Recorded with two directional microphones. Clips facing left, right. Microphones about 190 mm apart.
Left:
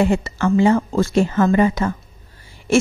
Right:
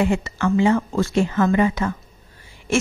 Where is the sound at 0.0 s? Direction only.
35° left (ahead or behind).